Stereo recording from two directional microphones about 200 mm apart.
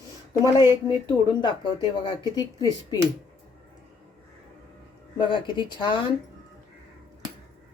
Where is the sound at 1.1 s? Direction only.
20° left (ahead or behind).